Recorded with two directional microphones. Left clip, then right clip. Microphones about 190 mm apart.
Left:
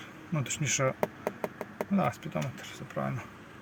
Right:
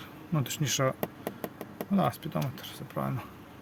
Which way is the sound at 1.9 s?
15° right (ahead or behind).